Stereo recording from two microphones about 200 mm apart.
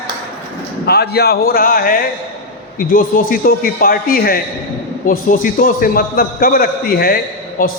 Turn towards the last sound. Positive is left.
turn(degrees=45)  # may be behind; listen again after turning